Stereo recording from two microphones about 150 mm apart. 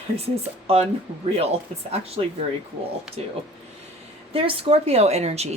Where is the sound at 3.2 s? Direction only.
45° right (ahead or behind).